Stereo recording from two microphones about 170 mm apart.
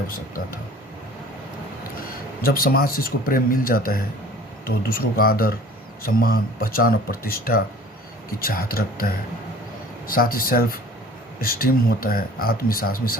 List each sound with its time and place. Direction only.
2.4 s speech: 60° left (ahead or behind)